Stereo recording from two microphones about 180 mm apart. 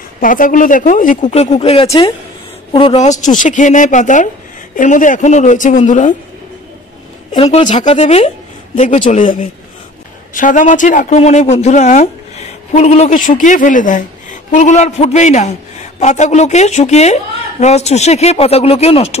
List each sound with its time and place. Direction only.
0.2 s speech: 50° left (ahead or behind)
1.3 s speech: 35° left (ahead or behind)
7.3 s speech: 35° left (ahead or behind)